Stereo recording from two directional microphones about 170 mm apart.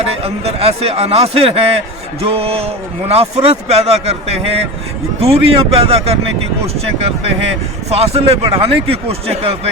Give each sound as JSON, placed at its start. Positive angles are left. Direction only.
{"t": 0.0, "sound": "a man's voice", "side_deg": -35}
{"t": 7.9, "sound": "a man's voice", "side_deg": -35}